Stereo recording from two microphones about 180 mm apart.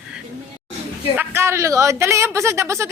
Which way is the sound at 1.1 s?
15° right (ahead or behind).